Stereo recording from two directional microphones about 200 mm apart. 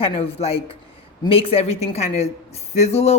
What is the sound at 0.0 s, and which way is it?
Speech, 30° left (ahead or behind).